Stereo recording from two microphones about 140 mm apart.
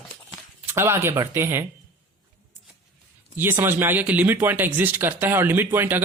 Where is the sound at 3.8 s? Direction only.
15° right (ahead or behind).